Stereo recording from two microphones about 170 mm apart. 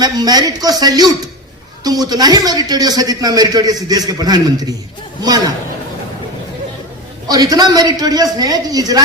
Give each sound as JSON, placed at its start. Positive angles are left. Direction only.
{"t": 0.0, "sound": "a man's voice", "side_deg": -25}
{"t": 7.3, "sound": "a man's voice", "side_deg": -20}